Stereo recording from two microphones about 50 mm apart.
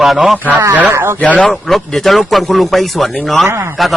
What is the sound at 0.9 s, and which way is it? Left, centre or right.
Speech, right.